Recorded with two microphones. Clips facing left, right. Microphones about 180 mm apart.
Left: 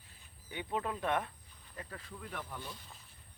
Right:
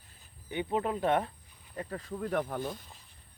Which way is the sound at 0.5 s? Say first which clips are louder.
Right 6 dB; 25° right (ahead or behind).